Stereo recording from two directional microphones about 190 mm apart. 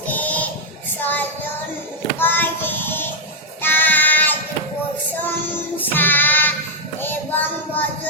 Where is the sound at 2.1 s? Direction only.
10° left (ahead or behind).